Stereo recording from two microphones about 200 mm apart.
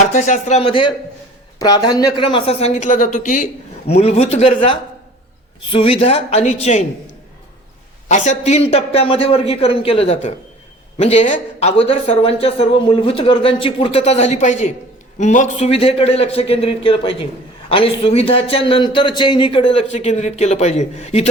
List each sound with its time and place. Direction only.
0.0 s a man's voice: 35° left (ahead or behind)
8.0 s a man's voice: 35° left (ahead or behind)